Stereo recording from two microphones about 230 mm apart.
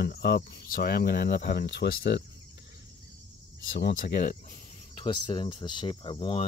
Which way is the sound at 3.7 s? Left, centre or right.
Left.